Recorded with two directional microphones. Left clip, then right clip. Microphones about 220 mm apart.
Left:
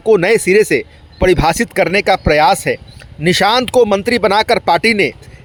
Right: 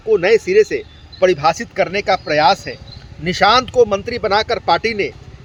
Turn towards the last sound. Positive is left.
turn(degrees=45)  # may be behind; listen again after turning